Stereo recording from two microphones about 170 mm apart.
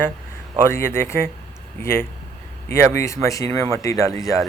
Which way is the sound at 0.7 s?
15° left (ahead or behind).